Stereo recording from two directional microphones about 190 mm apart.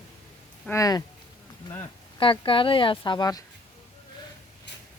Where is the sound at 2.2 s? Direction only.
25° left (ahead or behind).